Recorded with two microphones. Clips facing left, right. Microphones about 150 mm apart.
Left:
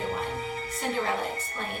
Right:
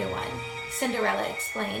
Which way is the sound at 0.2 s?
50° left (ahead or behind).